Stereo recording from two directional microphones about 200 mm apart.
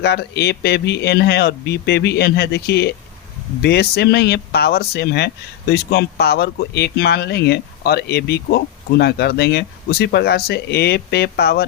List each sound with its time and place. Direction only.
0.0 s speech: 55° left (ahead or behind)